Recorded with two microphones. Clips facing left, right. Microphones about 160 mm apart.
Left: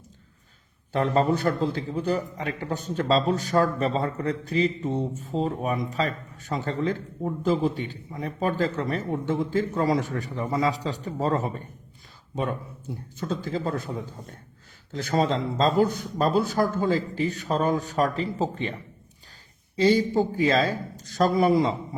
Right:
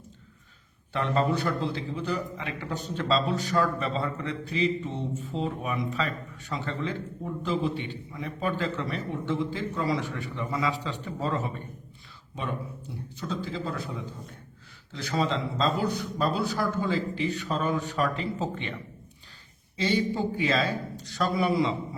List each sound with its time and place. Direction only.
0.9 s a man's voice: 40° left (ahead or behind)
13.1 s a man's voice: 50° left (ahead or behind)